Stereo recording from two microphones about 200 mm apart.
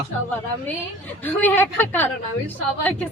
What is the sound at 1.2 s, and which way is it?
A woman's voice, 10° left (ahead or behind).